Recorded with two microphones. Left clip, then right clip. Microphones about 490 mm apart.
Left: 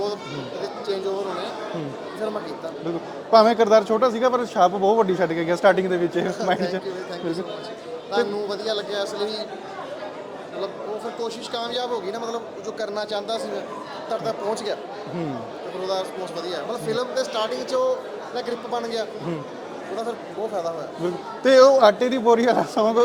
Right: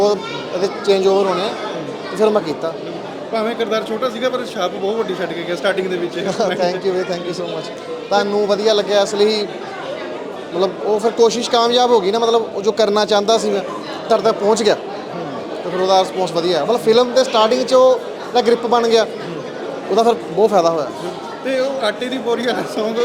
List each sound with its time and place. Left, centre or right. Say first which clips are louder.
0.6 s chatter: right 13 dB; right
2.2 s a man's voice: right 14 dB; right
3.3 s speech: left 5 dB; left
6.2 s speech: right 6 dB; right
8.1 s speech: right 8 dB; right
10.6 s a man's voice: right 14 dB; right
15.8 s a man's voice: right 13 dB; right
21.4 s speech: left 6 dB; left